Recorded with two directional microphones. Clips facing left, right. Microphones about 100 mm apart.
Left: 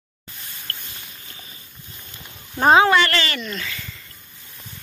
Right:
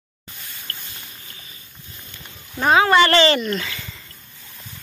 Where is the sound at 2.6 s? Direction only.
30° left (ahead or behind).